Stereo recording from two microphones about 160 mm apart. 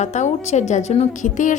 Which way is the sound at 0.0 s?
45° left (ahead or behind).